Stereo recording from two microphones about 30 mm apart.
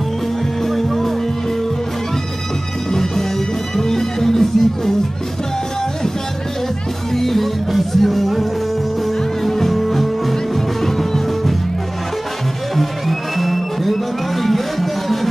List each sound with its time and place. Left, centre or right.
0.7 s music: centre
2.9 s music: centre
7.2 s music: centre
13.4 s music: centre